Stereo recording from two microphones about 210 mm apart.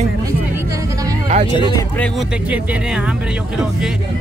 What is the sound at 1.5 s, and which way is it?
Speech, 25° left (ahead or behind).